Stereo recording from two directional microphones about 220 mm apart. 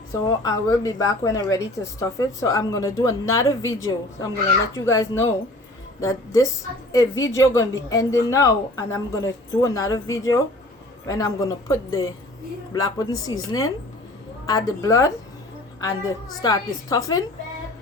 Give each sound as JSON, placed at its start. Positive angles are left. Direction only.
{"t": 0.1, "sound": "speech", "side_deg": 15}
{"t": 16.4, "sound": "speech", "side_deg": 15}